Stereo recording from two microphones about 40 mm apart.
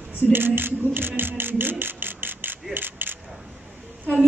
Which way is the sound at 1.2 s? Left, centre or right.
Right.